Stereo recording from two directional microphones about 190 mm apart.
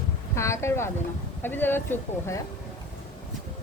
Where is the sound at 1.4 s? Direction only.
10° left (ahead or behind).